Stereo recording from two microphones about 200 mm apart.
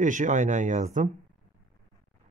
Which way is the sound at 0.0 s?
40° right (ahead or behind).